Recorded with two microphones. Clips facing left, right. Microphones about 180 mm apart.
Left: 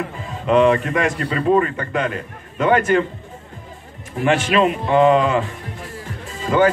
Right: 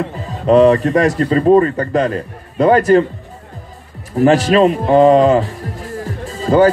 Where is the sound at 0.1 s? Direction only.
35° right (ahead or behind).